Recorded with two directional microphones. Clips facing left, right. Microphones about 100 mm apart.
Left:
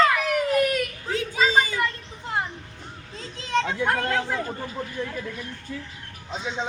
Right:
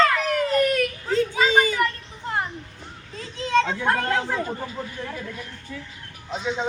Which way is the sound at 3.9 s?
25° right (ahead or behind).